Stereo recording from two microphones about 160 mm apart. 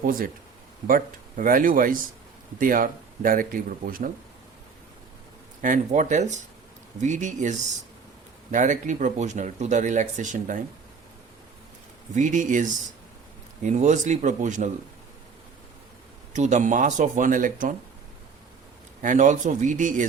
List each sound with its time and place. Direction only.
0.0 s speech: 65° right (ahead or behind)
5.6 s speech: 50° right (ahead or behind)
12.1 s speech: 50° right (ahead or behind)
16.3 s speech: 50° right (ahead or behind)
19.0 s speech: 50° right (ahead or behind)